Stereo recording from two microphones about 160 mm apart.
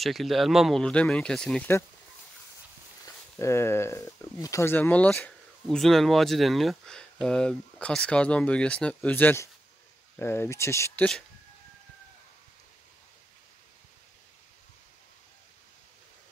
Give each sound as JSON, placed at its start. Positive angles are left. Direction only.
{"t": 0.0, "sound": "speech", "side_deg": 0}
{"t": 3.3, "sound": "speech", "side_deg": 15}